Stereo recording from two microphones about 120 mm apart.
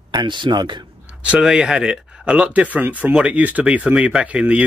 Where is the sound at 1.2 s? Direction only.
5° right (ahead or behind).